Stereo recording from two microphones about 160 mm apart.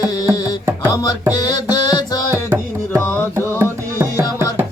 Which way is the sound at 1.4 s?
25° left (ahead or behind).